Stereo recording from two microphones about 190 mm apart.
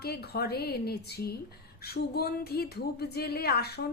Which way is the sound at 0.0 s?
55° left (ahead or behind).